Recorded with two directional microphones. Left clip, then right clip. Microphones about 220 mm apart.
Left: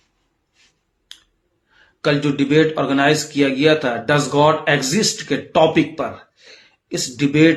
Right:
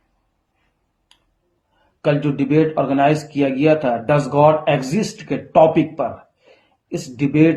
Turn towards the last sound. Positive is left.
turn(degrees=15)  # may be behind; listen again after turning